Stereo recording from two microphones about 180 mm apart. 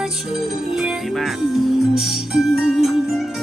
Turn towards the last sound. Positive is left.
turn(degrees=0)  # may be behind; listen again after turning